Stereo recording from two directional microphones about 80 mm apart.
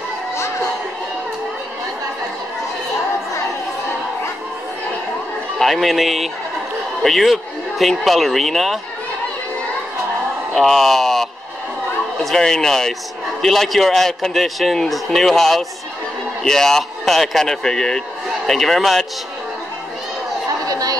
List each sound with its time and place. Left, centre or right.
5.6 s a man's voice: centre
10.5 s speech: centre
12.3 s a man's voice: centre
20.6 s chatter: right